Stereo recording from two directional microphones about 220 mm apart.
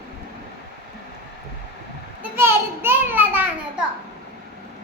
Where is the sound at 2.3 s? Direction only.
10° right (ahead or behind).